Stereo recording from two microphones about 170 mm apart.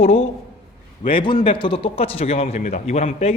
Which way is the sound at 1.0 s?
30° left (ahead or behind).